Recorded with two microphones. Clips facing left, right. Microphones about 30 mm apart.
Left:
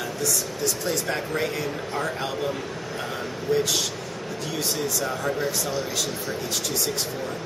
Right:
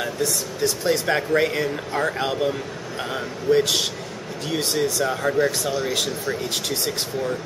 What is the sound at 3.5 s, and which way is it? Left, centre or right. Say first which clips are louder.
A man's voice: right 3 dB; right.